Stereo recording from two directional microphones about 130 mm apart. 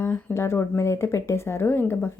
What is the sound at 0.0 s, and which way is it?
Speech, 20° left (ahead or behind).